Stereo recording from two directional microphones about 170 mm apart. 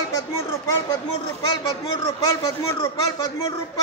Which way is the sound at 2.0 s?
20° left (ahead or behind).